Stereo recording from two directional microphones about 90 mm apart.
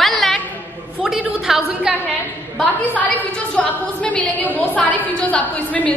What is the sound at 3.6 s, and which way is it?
A woman's voice, 15° left (ahead or behind).